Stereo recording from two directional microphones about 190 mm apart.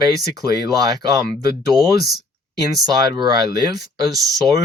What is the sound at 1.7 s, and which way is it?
Speech, 20° right (ahead or behind).